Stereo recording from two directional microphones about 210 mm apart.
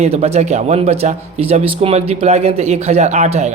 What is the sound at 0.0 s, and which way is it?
Speech, 30° right (ahead or behind).